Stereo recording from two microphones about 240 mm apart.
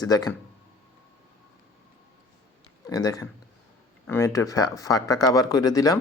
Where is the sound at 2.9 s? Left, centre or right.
Centre.